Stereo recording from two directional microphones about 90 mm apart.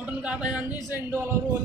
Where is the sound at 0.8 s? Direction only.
30° right (ahead or behind).